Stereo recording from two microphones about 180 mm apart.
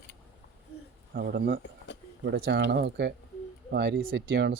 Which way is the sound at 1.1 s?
60° right (ahead or behind).